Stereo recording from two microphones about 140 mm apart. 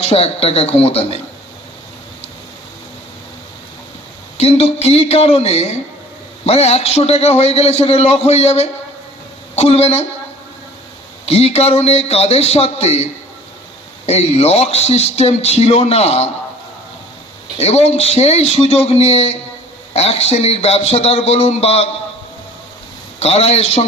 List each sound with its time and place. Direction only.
0.0 s a man's voice: 45° left (ahead or behind)
4.4 s a man's voice: 45° left (ahead or behind)
11.2 s a man's voice: 45° left (ahead or behind)
17.6 s a man's voice: 50° left (ahead or behind)
23.1 s a man's voice: 50° left (ahead or behind)